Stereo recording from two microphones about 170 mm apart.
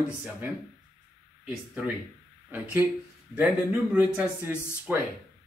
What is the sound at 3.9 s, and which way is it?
Speech, 10° right (ahead or behind).